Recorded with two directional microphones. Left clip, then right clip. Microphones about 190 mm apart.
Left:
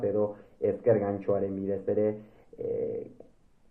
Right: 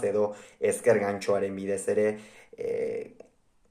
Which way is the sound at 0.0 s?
20° right (ahead or behind).